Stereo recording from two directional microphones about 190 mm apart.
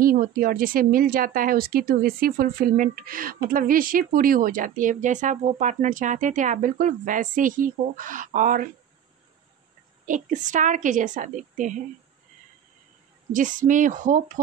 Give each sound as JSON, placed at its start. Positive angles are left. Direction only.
{"t": 0.0, "sound": "a woman's voice", "side_deg": -50}
{"t": 10.0, "sound": "a woman's voice", "side_deg": -40}
{"t": 13.3, "sound": "a woman's voice", "side_deg": -45}